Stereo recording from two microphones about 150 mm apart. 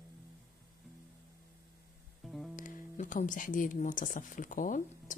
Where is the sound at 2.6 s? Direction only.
60° left (ahead or behind).